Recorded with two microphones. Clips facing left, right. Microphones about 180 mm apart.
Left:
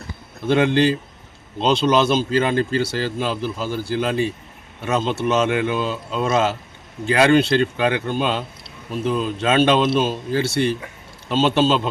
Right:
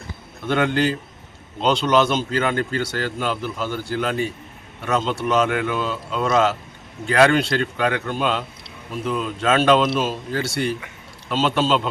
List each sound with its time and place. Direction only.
0.4 s a man's voice: 30° left (ahead or behind)